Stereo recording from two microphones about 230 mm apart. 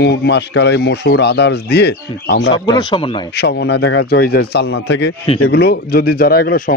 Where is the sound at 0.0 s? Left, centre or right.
Left.